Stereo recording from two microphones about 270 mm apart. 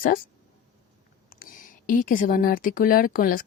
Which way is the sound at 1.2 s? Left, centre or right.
Left.